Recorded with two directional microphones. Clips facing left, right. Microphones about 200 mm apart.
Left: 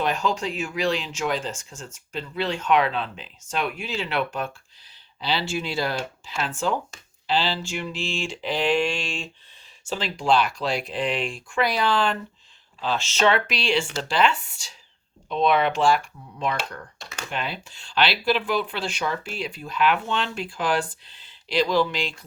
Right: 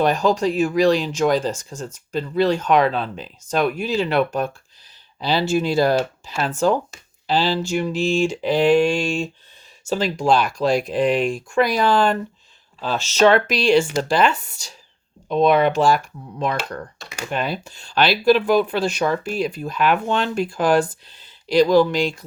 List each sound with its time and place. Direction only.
0.0 s speech: 40° right (ahead or behind)